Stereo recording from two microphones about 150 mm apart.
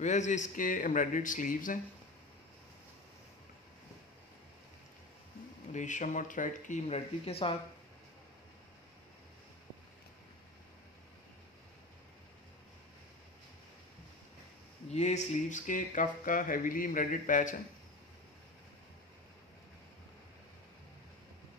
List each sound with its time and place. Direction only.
0.0 s speech: 55° left (ahead or behind)
5.7 s speech: 55° left (ahead or behind)
6.9 s speech: 40° left (ahead or behind)
14.9 s speech: 50° left (ahead or behind)